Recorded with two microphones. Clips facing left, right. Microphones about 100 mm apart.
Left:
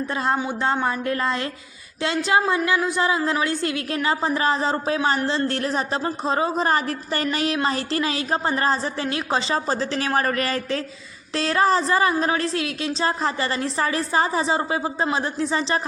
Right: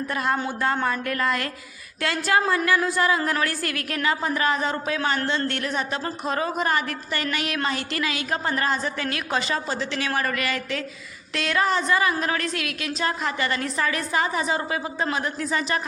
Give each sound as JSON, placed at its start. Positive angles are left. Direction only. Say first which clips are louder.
{"t": 0.1, "sound": "a woman's voice", "louder": "left 1 dB", "side_deg": 30}